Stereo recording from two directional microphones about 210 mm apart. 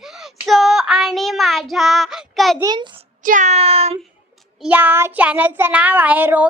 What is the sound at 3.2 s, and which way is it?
Child singing, 35° right (ahead or behind).